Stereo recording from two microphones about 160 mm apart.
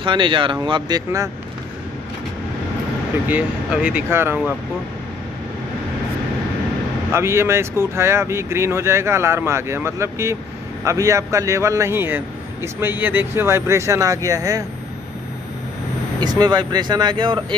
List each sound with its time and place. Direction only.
0.0 s a man's voice: 30° right (ahead or behind)
3.3 s speech: 10° right (ahead or behind)
7.1 s a man's voice: 15° right (ahead or behind)
16.2 s a man's voice: 25° right (ahead or behind)